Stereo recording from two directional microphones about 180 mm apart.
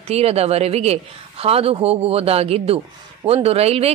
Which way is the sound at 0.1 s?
35° right (ahead or behind).